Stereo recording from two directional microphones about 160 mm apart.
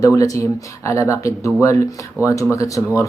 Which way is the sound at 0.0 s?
20° left (ahead or behind).